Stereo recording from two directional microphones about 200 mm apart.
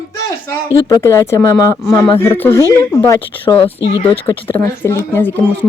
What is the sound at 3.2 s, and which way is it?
Speech, 25° left (ahead or behind).